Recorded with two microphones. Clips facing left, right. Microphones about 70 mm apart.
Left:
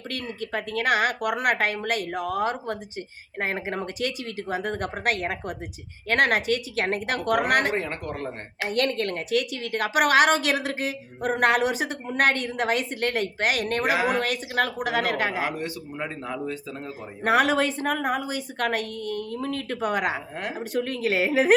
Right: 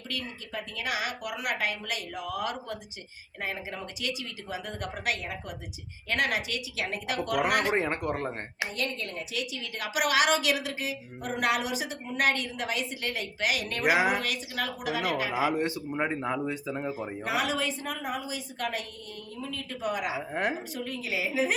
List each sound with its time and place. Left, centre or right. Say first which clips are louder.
0.1 s a woman's voice: left 6 dB; left
7.7 s speech: right 1 dB; centre
8.6 s a woman's voice: left 9 dB; left
15.5 s speech: right 3 dB; right
17.2 s a woman's voice: left 9 dB; left
20.3 s speech: right 3 dB; right
20.7 s a woman's voice: left 9 dB; left